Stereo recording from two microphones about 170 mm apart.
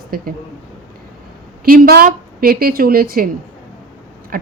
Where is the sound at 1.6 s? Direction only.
60° right (ahead or behind).